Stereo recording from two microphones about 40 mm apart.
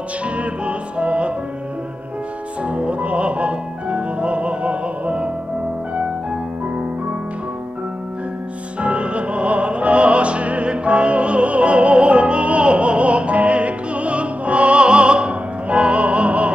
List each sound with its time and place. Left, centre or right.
0.2 s music: right
2.6 s music: right
8.8 s music: right